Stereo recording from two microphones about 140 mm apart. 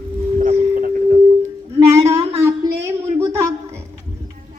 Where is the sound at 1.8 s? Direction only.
20° right (ahead or behind).